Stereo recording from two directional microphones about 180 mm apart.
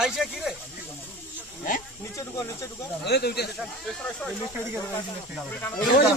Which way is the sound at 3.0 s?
65° left (ahead or behind).